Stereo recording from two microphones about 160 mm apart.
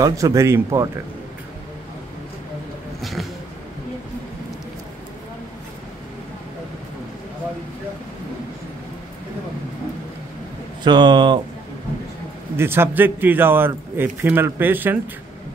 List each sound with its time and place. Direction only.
0.0 s speech: 20° right (ahead or behind)
3.0 s vehicle: centre (ahead or behind)
10.8 s speech: 30° right (ahead or behind)
12.5 s a man's voice: 15° right (ahead or behind)